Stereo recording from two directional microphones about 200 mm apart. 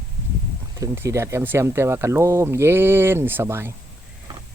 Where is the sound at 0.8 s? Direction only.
15° right (ahead or behind).